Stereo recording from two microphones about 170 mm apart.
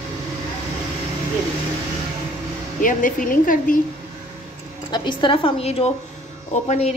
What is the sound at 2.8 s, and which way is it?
Speech, 50° left (ahead or behind).